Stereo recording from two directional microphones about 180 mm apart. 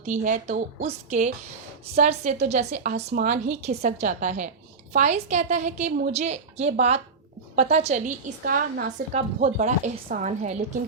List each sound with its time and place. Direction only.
0.0 s a woman's voice: 45° right (ahead or behind)
9.1 s a woman's voice: 40° right (ahead or behind)